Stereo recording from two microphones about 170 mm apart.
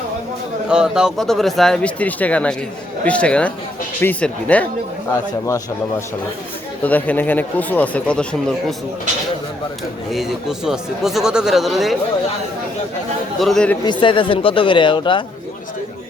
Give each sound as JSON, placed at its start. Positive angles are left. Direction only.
{"t": 0.7, "sound": "speech", "side_deg": -5}
{"t": 6.8, "sound": "speech", "side_deg": 10}
{"t": 10.1, "sound": "speech", "side_deg": 0}
{"t": 13.4, "sound": "speech", "side_deg": 5}
{"t": 13.8, "sound": "speech", "side_deg": 30}